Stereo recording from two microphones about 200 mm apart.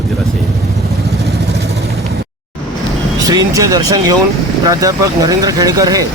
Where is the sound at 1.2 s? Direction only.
55° right (ahead or behind).